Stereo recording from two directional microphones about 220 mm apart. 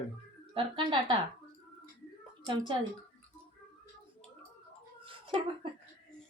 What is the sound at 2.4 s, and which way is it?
Speech, 20° right (ahead or behind).